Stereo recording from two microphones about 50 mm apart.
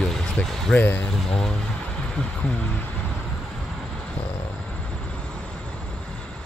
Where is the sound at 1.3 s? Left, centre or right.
Centre.